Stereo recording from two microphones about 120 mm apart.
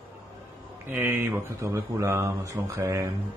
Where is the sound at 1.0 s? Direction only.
20° right (ahead or behind).